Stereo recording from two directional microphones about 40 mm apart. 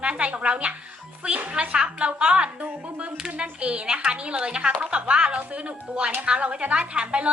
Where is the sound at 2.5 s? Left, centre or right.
Right.